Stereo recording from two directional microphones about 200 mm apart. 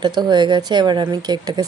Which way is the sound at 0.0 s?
20° right (ahead or behind).